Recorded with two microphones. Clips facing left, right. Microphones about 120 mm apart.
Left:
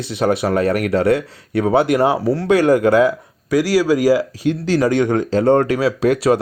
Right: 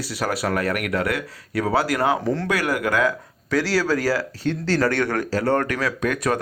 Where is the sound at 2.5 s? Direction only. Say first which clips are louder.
Left 13 dB; 25° left (ahead or behind).